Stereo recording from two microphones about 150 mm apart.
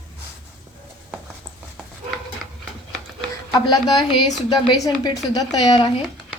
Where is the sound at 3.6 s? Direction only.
25° left (ahead or behind).